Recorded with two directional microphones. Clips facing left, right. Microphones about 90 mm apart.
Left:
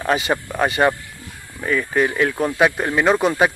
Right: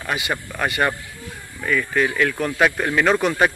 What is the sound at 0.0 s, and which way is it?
Speech, 30° left (ahead or behind).